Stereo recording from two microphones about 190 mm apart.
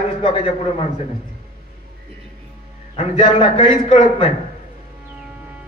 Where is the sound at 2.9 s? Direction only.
30° left (ahead or behind).